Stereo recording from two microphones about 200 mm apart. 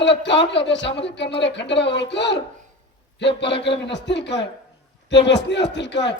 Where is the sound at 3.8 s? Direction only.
60° left (ahead or behind).